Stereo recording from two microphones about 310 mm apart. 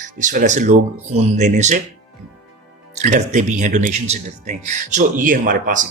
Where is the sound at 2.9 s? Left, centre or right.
Right.